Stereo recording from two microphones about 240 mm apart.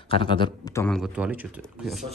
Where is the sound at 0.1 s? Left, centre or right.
Left.